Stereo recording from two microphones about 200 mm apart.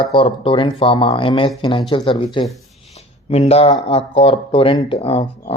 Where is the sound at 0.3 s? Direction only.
25° left (ahead or behind).